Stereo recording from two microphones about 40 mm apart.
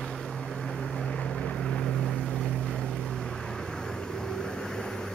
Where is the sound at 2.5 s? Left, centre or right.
Centre.